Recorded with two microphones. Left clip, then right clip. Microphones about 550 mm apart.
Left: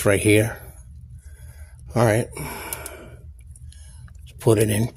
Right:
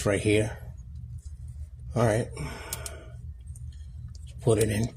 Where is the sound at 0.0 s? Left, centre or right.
Left.